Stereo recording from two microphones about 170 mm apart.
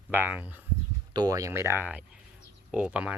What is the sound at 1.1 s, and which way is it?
Speech, 20° right (ahead or behind).